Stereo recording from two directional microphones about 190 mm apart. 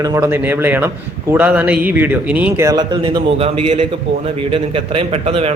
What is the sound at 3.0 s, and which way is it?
A man's voice, 30° right (ahead or behind).